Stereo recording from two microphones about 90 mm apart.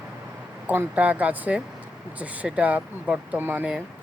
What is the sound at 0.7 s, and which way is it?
Speech, 20° right (ahead or behind).